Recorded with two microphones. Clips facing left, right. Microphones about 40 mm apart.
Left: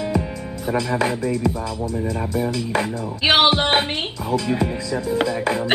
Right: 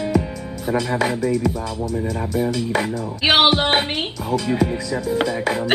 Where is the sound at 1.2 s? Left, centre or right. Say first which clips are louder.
Right 2 dB; left.